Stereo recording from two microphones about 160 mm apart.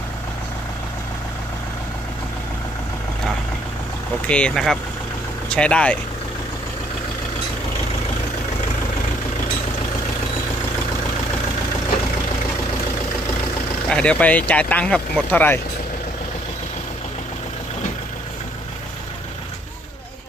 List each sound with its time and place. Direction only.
4.3 s speech: 5° left (ahead or behind)
13.9 s speech: 5° left (ahead or behind)